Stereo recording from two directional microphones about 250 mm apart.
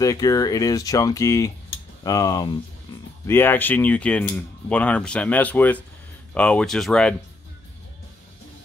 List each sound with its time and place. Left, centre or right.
0.0 s speech: centre